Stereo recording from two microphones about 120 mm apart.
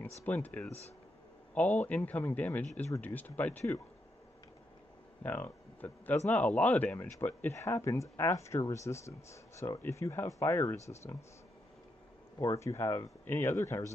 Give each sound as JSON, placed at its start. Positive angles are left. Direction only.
{"t": 0.2, "sound": "a man's voice", "side_deg": 15}
{"t": 5.2, "sound": "speech", "side_deg": 15}
{"t": 12.4, "sound": "speech", "side_deg": 25}